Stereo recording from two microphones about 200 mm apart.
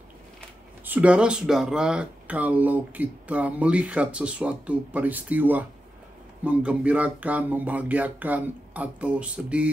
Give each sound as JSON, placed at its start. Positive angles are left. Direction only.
{"t": 0.8, "sound": "speech", "side_deg": -5}